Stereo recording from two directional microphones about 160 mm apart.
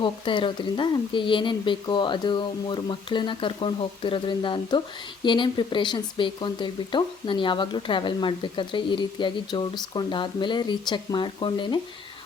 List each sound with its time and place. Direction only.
0.0 s speech: 30° left (ahead or behind)